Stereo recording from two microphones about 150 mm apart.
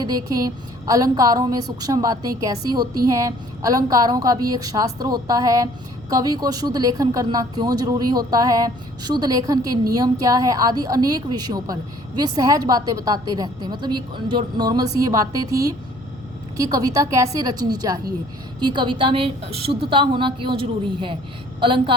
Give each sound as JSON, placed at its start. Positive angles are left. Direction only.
{"t": 0.3, "sound": "a woman's voice", "side_deg": -25}